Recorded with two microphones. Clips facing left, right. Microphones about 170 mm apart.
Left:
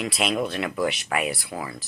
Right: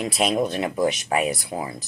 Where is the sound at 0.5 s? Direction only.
25° right (ahead or behind).